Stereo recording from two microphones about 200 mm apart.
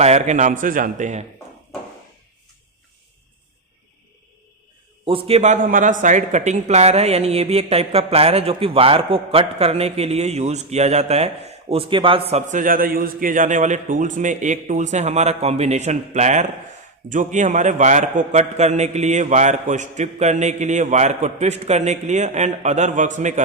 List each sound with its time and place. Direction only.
0.0 s a man's voice: 35° right (ahead or behind)
5.0 s a man's voice: 25° right (ahead or behind)